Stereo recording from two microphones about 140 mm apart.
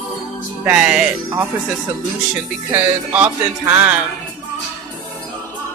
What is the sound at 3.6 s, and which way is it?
Speech, 20° right (ahead or behind).